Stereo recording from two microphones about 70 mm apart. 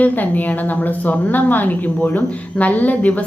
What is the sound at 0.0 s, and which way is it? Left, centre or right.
A woman's voice, left.